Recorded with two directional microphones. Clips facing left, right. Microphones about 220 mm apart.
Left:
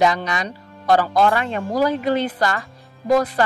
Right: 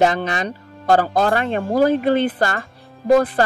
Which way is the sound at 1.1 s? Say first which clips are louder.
Even; 45° right (ahead or behind).